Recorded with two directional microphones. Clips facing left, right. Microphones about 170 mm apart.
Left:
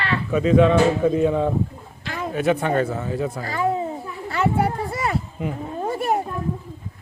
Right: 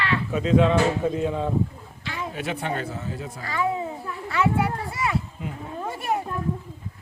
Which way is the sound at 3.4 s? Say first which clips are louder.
Even; 40° left (ahead or behind).